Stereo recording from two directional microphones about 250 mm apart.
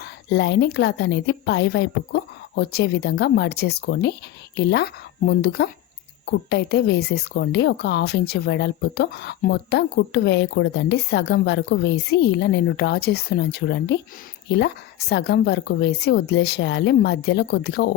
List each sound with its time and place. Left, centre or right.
0.0 s a woman's voice: left